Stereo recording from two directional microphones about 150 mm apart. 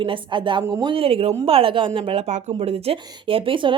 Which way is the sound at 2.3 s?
45° right (ahead or behind).